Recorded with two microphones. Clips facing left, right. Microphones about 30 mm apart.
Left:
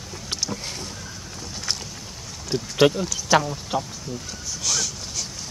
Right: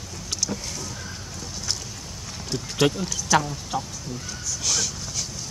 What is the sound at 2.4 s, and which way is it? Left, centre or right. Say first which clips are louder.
Speech: left 4 dB; centre.